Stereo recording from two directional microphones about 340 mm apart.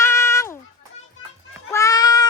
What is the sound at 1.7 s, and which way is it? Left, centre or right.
Goat, centre.